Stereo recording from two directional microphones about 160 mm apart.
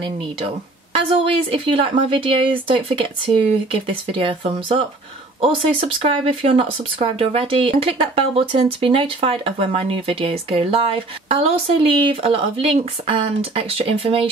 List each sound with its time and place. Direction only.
0.9 s speech: 35° right (ahead or behind)
4.2 s speech: 35° right (ahead or behind)